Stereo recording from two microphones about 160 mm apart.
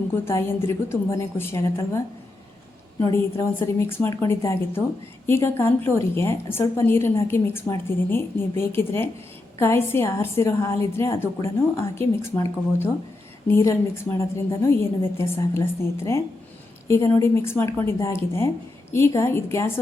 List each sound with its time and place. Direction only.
0.1 s a woman's voice: 15° left (ahead or behind)
3.0 s a woman's voice: 15° left (ahead or behind)